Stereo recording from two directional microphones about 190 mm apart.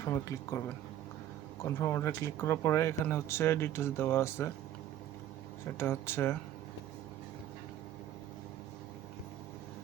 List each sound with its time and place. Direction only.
0.0 s speech: 15° left (ahead or behind)
1.6 s speech: 15° left (ahead or behind)
5.7 s speech: 10° left (ahead or behind)